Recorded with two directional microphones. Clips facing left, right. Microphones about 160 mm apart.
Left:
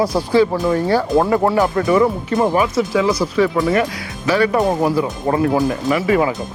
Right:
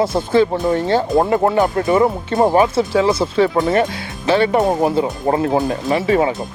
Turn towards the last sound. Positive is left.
turn(degrees=-30)  # may be behind; listen again after turning